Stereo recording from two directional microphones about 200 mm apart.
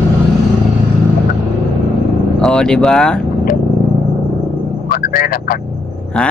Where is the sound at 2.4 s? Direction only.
5° left (ahead or behind).